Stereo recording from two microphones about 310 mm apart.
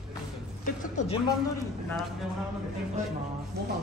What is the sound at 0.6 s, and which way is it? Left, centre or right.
Music, left.